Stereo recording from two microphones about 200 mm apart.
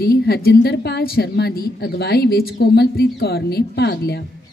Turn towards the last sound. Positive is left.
turn(degrees=55)  # may be behind; listen again after turning